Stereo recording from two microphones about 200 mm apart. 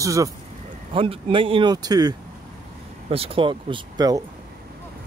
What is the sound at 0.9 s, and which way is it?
Speech, 25° right (ahead or behind).